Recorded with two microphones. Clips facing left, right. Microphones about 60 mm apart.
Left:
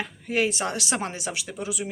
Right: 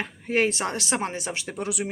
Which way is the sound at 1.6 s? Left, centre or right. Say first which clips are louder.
Right 2 dB; right.